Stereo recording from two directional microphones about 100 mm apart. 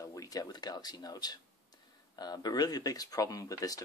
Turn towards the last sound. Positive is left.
turn(degrees=40)  # may be behind; listen again after turning